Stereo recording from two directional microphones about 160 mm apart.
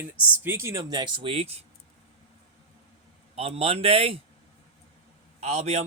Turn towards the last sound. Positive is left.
turn(degrees=-45)  # may be behind; listen again after turning